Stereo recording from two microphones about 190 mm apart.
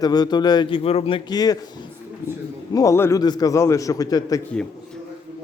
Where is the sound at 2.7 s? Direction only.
15° left (ahead or behind).